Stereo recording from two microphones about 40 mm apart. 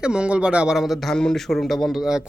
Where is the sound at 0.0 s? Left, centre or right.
Right.